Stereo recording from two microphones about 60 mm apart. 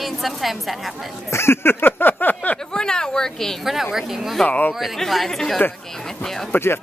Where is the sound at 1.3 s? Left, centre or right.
Left.